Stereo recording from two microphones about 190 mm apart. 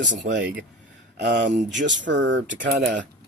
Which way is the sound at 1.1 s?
65° right (ahead or behind).